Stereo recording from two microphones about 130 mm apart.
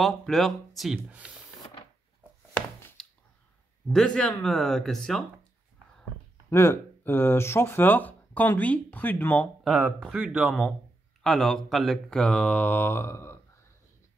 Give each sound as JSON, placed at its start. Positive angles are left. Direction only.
{"t": 0.0, "sound": "speech", "side_deg": 0}
{"t": 0.9, "sound": "speech", "side_deg": -10}
{"t": 2.5, "sound": "a sound", "side_deg": 15}
{"t": 3.8, "sound": "speech", "side_deg": 5}
{"t": 6.5, "sound": "speech", "side_deg": 20}
{"t": 10.1, "sound": "speech", "side_deg": -10}
{"t": 11.2, "sound": "speech", "side_deg": 5}